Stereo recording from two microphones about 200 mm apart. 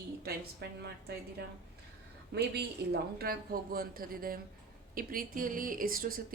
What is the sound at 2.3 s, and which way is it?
A woman's voice, 55° right (ahead or behind).